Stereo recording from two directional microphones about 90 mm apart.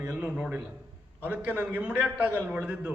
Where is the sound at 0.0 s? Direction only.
15° right (ahead or behind).